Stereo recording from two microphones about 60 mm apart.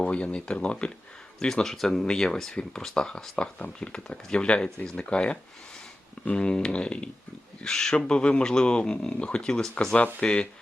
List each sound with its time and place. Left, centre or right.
0.0 s speech: centre